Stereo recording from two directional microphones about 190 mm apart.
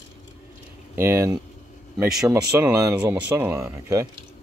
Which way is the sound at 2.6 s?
15° right (ahead or behind).